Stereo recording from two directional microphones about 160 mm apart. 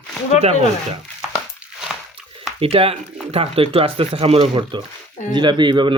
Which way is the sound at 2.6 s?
35° right (ahead or behind).